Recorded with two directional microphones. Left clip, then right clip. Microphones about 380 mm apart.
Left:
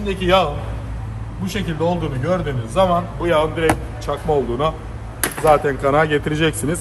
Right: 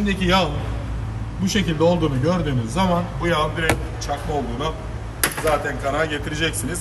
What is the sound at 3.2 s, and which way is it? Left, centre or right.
Speech, centre.